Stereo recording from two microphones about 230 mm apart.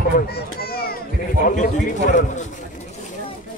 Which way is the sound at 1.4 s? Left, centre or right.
Left.